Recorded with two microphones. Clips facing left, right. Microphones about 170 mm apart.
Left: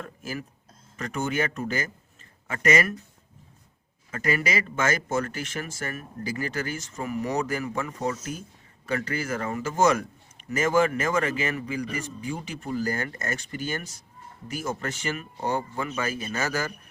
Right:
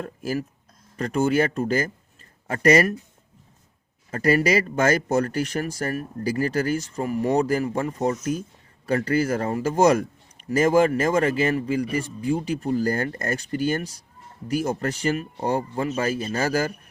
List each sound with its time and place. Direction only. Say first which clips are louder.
0.0 s speech: right 7 dB; 40° right (ahead or behind)
4.1 s speech: right 7 dB; 40° right (ahead or behind)